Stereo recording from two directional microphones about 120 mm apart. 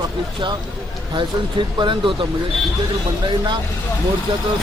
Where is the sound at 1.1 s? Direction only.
40° right (ahead or behind).